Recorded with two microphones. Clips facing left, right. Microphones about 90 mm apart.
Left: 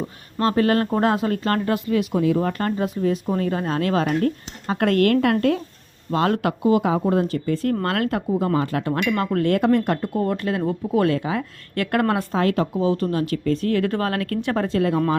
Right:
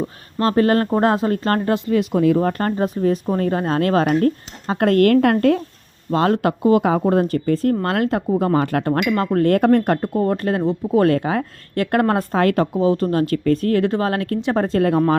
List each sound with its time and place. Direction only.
0.4 s speech: 35° right (ahead or behind)
4.6 s speech: 30° right (ahead or behind)
6.1 s speech: 30° right (ahead or behind)
6.6 s speech: 50° right (ahead or behind)
7.8 s speech: 25° right (ahead or behind)
8.4 s speech: 60° right (ahead or behind)
8.9 s speech: 20° right (ahead or behind)
9.1 s speech: 30° right (ahead or behind)
9.5 s speech: 45° right (ahead or behind)
10.6 s speech: 25° right (ahead or behind)
11.0 s speech: 50° right (ahead or behind)
11.7 s speech: 30° right (ahead or behind)
12.3 s speech: 55° right (ahead or behind)
13.8 s speech: 25° right (ahead or behind); by 15.0 s 45° right (ahead or behind)